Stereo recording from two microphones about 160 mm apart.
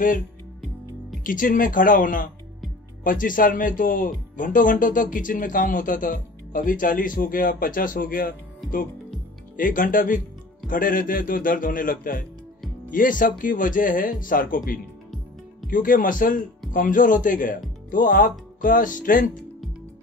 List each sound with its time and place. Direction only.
1.2 s speech: 55° left (ahead or behind)
9.6 s speech: 55° left (ahead or behind)